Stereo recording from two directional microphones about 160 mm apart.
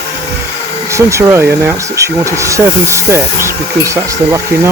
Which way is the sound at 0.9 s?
20° right (ahead or behind).